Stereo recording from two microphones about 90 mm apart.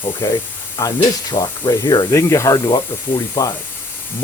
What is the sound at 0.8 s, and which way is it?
Spray, 40° left (ahead or behind).